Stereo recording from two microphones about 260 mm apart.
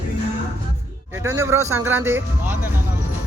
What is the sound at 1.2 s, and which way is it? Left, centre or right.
Speech, centre.